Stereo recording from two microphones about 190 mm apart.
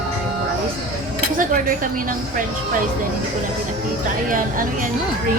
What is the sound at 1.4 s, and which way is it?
Speech, 50° right (ahead or behind).